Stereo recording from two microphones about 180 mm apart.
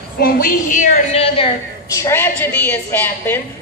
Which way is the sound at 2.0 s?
15° left (ahead or behind).